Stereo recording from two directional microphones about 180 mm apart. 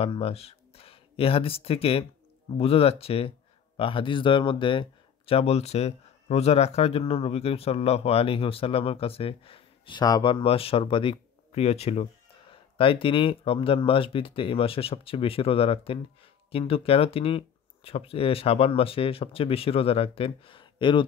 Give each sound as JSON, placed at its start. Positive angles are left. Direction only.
{"t": 0.0, "sound": "speech", "side_deg": 35}